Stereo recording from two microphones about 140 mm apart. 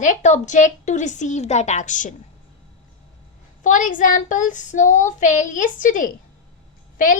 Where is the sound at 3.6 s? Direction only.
70° left (ahead or behind).